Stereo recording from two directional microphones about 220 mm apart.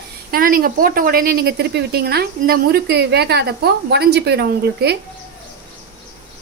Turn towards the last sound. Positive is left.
turn(degrees=-45)  # may be behind; listen again after turning